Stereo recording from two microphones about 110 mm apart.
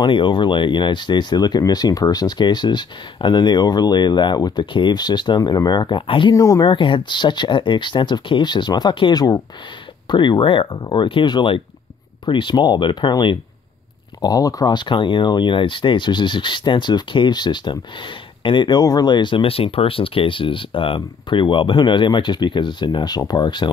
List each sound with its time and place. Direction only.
0.0 s speech: 50° left (ahead or behind)
6.3 s speech: 30° left (ahead or behind)
6.7 s speech: 50° left (ahead or behind)
14.2 s speech: 35° left (ahead or behind)